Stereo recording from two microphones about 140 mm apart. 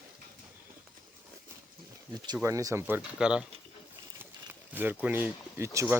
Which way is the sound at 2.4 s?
25° right (ahead or behind).